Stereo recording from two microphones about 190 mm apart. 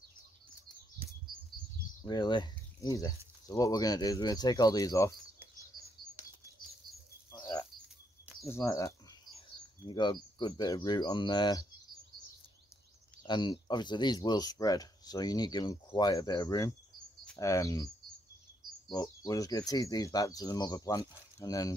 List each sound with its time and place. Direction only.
2.0 s speech: 20° left (ahead or behind)
6.2 s chirp: 10° right (ahead or behind)
6.6 s chirp: 25° left (ahead or behind)
8.5 s speech: 15° left (ahead or behind)
13.2 s speech: 25° left (ahead or behind)